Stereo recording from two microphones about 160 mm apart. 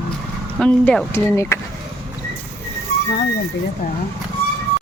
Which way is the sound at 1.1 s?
15° left (ahead or behind).